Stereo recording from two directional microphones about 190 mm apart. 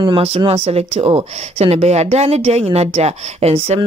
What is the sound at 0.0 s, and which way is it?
Speech, 30° right (ahead or behind).